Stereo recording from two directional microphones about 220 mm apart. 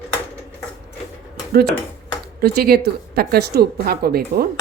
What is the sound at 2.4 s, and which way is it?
A woman's voice, 45° right (ahead or behind).